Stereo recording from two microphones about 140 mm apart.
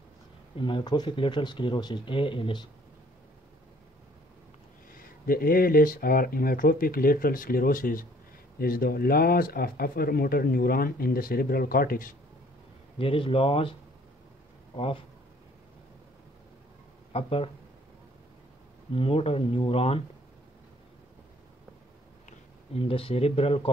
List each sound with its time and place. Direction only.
0.6 s speech: 35° left (ahead or behind)
4.9 s speech: 90° left
13.0 s speech: 40° left (ahead or behind)
17.1 s speech: 45° left (ahead or behind)
18.9 s speech: 40° left (ahead or behind)
22.8 s speech: 45° left (ahead or behind)